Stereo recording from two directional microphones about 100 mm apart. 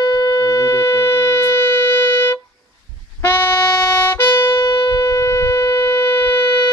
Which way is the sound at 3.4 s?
25° left (ahead or behind).